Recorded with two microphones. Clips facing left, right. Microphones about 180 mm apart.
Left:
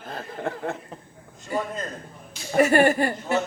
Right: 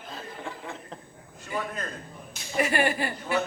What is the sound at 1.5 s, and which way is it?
A man's voice, 40° left (ahead or behind).